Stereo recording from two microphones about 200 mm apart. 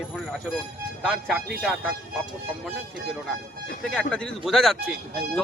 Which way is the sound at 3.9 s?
5° left (ahead or behind).